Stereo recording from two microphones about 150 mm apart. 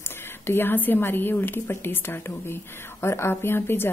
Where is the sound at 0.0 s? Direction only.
15° left (ahead or behind).